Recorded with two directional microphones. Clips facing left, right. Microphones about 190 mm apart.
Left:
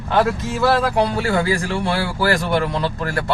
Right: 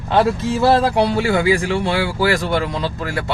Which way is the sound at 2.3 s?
Centre (ahead or behind).